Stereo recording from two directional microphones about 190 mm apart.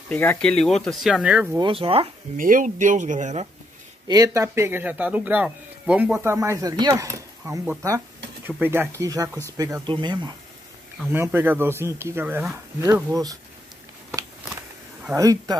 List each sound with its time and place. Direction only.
0.1 s speech: 10° left (ahead or behind); by 1.6 s 10° right (ahead or behind)
1.6 s speech: 30° right (ahead or behind)
2.3 s speech: 45° right (ahead or behind)
4.1 s speech: 15° right (ahead or behind)
11.1 s speech: 10° right (ahead or behind)
15.1 s speech: 20° right (ahead or behind)